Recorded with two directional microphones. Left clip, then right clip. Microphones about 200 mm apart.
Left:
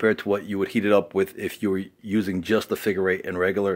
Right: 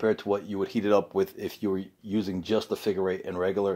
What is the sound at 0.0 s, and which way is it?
Speech, 30° left (ahead or behind).